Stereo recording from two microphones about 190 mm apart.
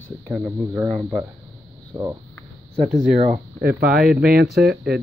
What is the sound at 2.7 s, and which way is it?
Speech, 35° right (ahead or behind).